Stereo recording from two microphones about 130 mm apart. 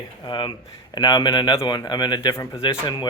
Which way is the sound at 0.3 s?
40° left (ahead or behind).